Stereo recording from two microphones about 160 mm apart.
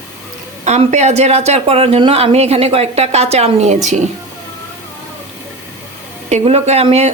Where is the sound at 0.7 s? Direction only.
45° right (ahead or behind).